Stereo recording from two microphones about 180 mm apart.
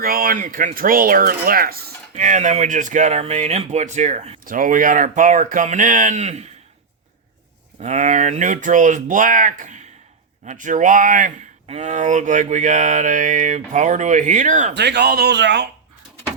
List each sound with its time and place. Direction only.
0.0 s speech: 55° right (ahead or behind)
7.8 s speech: 40° right (ahead or behind)
14.7 s speech: 70° right (ahead or behind)